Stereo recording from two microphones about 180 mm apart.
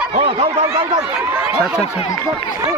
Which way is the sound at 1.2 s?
5° right (ahead or behind).